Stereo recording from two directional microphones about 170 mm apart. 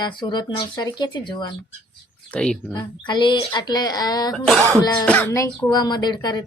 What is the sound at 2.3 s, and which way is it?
Speech, 5° left (ahead or behind).